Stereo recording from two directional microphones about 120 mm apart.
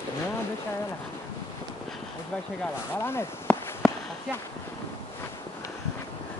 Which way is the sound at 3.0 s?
20° left (ahead or behind).